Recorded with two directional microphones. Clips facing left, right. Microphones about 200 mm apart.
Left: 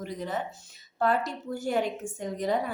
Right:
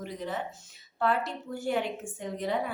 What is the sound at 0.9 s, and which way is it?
A woman's voice, 40° left (ahead or behind).